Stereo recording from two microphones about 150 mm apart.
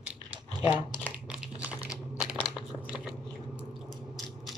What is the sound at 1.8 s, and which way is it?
Crumpling, 5° right (ahead or behind).